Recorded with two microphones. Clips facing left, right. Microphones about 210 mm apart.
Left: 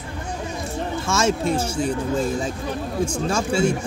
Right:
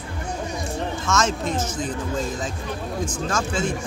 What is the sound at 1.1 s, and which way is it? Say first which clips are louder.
Speech: left 3 dB; 10° left (ahead or behind).